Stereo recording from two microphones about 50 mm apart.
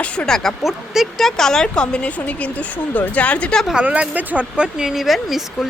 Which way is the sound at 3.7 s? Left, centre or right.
Right.